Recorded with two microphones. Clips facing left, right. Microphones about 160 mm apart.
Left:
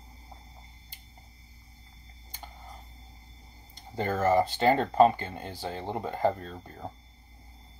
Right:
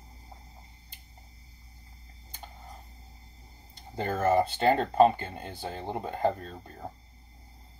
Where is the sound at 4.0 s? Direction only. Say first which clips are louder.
Left 1 dB; 20° right (ahead or behind).